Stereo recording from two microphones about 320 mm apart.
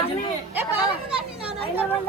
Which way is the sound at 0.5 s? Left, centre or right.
Centre.